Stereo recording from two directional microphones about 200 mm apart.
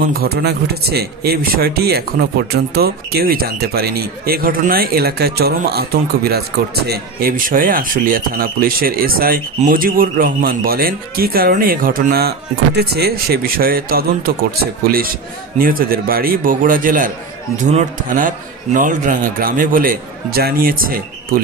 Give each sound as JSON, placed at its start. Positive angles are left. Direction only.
{"t": 0.1, "sound": "speech", "side_deg": -50}